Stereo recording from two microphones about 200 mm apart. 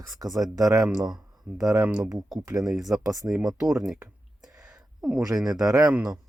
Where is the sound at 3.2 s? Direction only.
Centre (ahead or behind).